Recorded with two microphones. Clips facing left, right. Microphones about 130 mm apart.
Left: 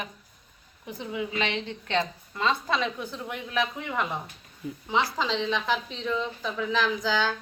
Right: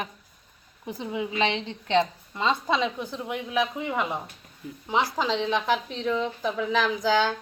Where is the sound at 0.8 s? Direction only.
25° right (ahead or behind).